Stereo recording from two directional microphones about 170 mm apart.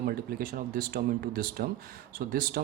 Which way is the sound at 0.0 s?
60° right (ahead or behind).